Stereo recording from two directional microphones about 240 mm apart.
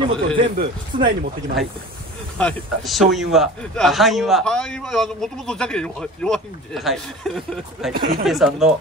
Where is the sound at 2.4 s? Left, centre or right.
Centre.